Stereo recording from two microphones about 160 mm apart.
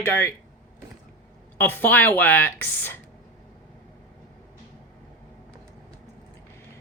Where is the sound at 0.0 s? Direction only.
15° left (ahead or behind).